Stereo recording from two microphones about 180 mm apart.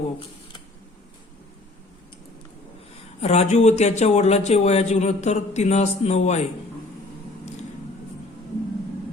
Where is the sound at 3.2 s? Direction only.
35° left (ahead or behind).